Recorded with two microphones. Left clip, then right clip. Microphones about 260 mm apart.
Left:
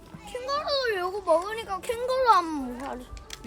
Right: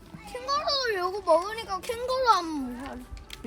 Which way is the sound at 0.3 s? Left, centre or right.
Centre.